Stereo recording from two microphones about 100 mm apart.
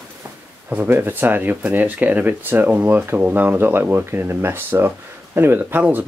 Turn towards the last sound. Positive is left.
turn(degrees=-20)  # may be behind; listen again after turning